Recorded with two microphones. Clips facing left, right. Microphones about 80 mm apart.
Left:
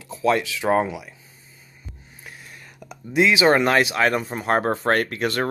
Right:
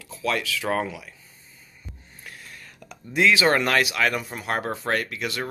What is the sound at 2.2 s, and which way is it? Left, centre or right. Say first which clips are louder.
Speech: left 1 dB; centre.